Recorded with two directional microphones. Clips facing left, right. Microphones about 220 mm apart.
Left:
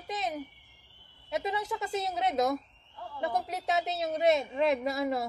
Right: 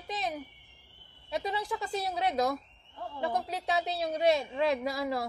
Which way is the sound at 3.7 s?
20° left (ahead or behind).